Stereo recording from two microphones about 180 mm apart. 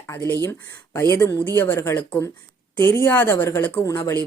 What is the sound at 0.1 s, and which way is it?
Speech, 15° left (ahead or behind).